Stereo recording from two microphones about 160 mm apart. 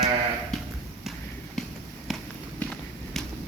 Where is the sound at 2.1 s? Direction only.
Centre (ahead or behind).